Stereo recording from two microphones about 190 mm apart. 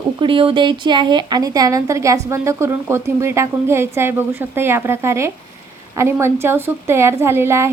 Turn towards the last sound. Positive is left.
turn(degrees=-15)  # may be behind; listen again after turning